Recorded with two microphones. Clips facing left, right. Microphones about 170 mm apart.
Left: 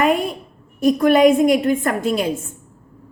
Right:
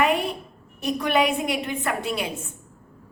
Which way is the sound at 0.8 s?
45° left (ahead or behind).